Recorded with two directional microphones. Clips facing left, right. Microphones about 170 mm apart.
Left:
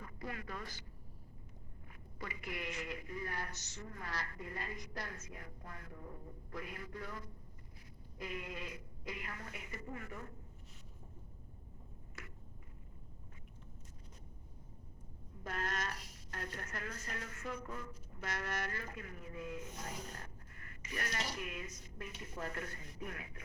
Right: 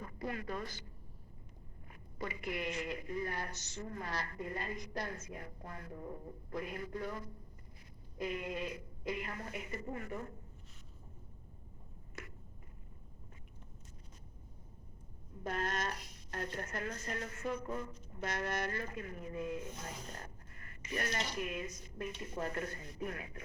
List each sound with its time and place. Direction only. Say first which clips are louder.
0.0 s speech: right 5 dB; 30° right (ahead or behind)
2.1 s speech: right 5 dB; 30° right (ahead or behind)
8.2 s speech: right 6 dB; 25° right (ahead or behind)
15.4 s speech: right 4 dB; 25° right (ahead or behind)
20.9 s speech: right 4 dB; 30° right (ahead or behind)